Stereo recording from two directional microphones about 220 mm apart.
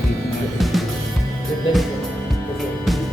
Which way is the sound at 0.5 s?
Centre (ahead or behind).